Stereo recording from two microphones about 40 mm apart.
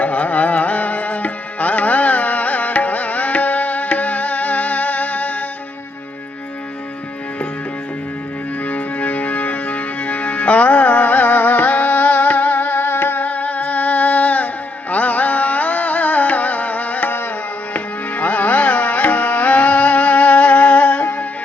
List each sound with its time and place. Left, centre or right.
0.0 s music: left
8.6 s music: left
12.8 s music: left
13.2 s music: left